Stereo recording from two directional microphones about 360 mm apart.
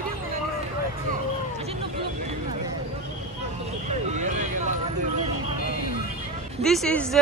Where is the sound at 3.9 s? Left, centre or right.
Centre.